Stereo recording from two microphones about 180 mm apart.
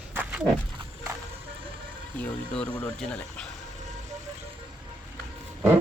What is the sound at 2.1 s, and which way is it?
Speech, 5° left (ahead or behind).